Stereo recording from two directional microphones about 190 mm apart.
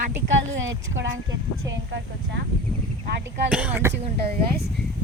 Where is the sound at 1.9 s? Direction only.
65° right (ahead or behind).